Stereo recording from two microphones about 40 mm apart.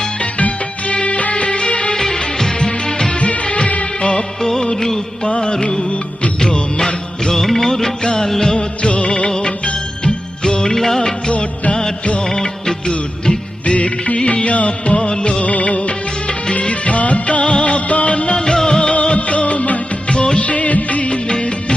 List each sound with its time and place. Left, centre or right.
0.2 s music of bollywood: left
1.0 s music: left
3.2 s music of bollywood: left
4.1 s music of bollywood: centre
8.0 s music: left
8.8 s music: left
10.8 s music of bollywood: centre
11.3 s music of bollywood: left
12.2 s music of bollywood: centre
13.7 s music of bollywood: left
20.1 s music of bollywood: left
20.4 s music of bollywood: left
21.1 s music of bollywood: left